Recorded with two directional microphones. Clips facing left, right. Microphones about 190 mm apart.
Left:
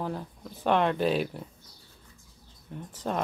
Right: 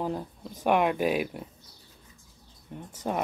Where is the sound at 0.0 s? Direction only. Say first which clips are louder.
Right 2 dB; 15° right (ahead or behind).